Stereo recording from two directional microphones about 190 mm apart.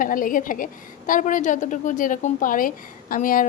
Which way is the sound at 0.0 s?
45° left (ahead or behind).